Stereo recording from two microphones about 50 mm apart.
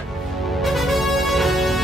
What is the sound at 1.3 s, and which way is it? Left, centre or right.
Music, centre.